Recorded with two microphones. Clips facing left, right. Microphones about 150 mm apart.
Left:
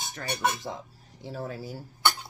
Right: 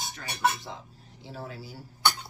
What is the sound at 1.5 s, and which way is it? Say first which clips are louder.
Speech: left 5 dB; 45° left (ahead or behind).